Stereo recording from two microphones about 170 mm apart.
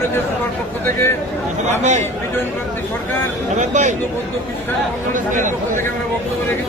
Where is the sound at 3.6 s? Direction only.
45° right (ahead or behind).